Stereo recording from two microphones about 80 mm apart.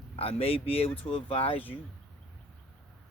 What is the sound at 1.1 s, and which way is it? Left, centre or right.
Speech, left.